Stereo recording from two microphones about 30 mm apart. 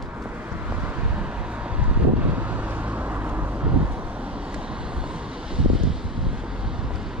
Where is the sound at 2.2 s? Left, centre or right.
Right.